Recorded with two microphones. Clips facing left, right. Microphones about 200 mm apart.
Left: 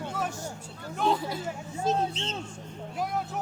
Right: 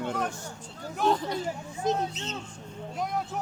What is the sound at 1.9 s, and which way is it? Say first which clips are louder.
Speech: even; 20° right (ahead or behind).